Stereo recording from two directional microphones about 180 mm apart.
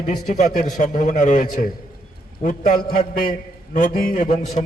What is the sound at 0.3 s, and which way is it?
A man's voice, 45° left (ahead or behind).